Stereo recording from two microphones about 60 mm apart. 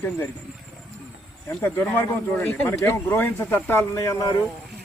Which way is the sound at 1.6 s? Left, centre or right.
Left.